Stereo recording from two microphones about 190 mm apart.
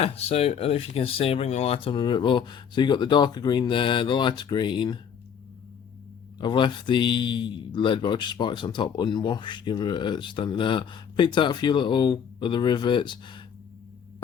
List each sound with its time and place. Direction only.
0.0 s a man's voice: 30° left (ahead or behind)
6.4 s a man's voice: 25° left (ahead or behind)